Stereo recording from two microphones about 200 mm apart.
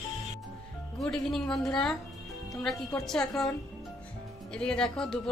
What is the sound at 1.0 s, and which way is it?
Speech, 5° left (ahead or behind).